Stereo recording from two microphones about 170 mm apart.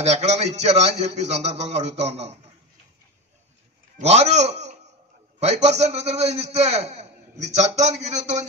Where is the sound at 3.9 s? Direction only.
40° right (ahead or behind).